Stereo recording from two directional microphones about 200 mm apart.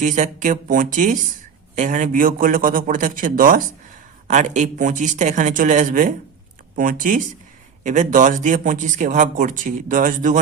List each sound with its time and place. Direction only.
0.0 s a man's voice: 40° right (ahead or behind)